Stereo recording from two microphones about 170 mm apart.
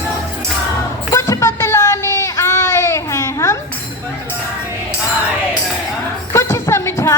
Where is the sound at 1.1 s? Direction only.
15° left (ahead or behind).